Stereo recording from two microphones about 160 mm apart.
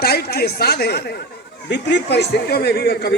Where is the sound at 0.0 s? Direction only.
75° left (ahead or behind).